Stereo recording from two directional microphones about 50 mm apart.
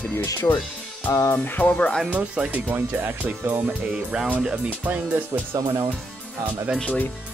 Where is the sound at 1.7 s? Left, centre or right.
Centre.